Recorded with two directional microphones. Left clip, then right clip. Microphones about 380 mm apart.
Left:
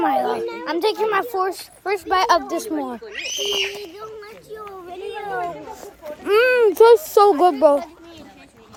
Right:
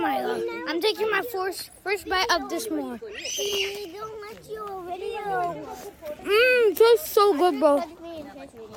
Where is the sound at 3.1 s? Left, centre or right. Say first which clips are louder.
Left 4 dB; centre.